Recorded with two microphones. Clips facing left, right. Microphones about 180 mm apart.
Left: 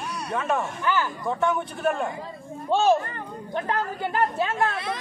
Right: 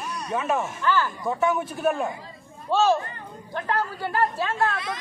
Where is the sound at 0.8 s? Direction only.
15° left (ahead or behind).